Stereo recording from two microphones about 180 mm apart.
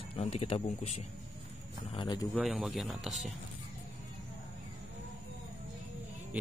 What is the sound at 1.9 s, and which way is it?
Speech, 25° left (ahead or behind).